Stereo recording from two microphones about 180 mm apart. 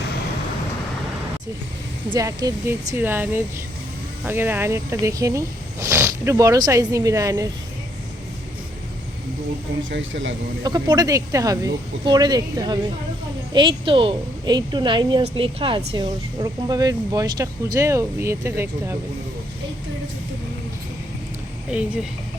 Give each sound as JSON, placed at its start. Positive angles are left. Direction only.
{"t": 2.0, "sound": "speech", "side_deg": -20}
{"t": 9.9, "sound": "a man's voice", "side_deg": -90}
{"t": 10.6, "sound": "speech", "side_deg": -20}
{"t": 21.7, "sound": "speech", "side_deg": -5}